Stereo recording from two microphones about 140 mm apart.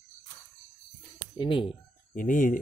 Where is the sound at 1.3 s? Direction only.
35° left (ahead or behind).